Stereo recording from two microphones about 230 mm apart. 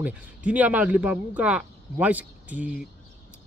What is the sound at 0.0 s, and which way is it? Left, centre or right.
Speech, centre.